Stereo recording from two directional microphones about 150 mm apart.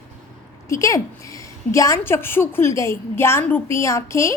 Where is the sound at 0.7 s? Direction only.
20° left (ahead or behind).